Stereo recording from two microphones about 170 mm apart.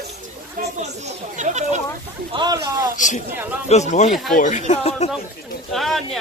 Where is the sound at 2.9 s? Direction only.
50° left (ahead or behind).